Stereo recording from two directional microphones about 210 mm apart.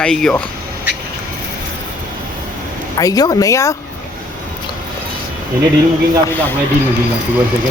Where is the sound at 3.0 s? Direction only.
15° left (ahead or behind).